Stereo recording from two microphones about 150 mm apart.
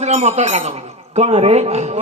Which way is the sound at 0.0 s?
45° right (ahead or behind).